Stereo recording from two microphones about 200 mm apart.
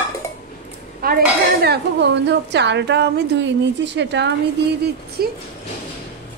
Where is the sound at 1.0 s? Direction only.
50° right (ahead or behind).